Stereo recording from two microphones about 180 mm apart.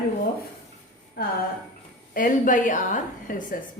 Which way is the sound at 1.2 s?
55° left (ahead or behind).